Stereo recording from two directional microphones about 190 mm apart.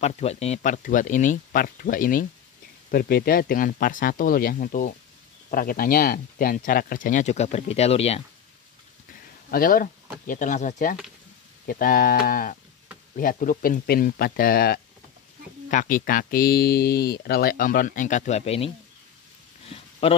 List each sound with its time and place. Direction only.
0.0 s speech: 35° left (ahead or behind)
9.5 s speech: 50° left (ahead or behind); by 18.7 s 30° left (ahead or behind)
19.6 s a sound: 30° left (ahead or behind)